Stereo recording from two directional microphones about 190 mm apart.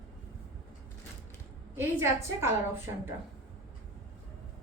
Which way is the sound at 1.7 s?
15° right (ahead or behind).